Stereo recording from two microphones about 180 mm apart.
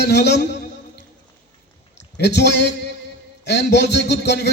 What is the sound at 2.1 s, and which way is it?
A man's voice, 70° left (ahead or behind).